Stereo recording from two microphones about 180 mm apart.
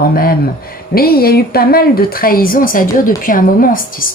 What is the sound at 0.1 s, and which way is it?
A woman's voice, 55° left (ahead or behind).